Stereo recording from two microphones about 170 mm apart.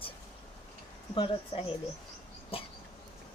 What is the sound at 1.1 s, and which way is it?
A woman's voice, 30° left (ahead or behind).